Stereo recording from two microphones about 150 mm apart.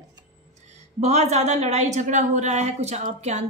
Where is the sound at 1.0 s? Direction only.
45° right (ahead or behind).